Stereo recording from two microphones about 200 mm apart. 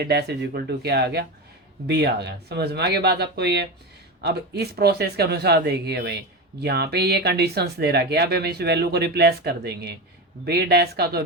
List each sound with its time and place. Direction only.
0.0 s speech: 55° right (ahead or behind)